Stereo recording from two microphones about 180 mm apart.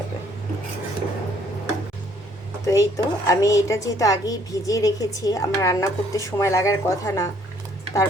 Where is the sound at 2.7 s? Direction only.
20° left (ahead or behind).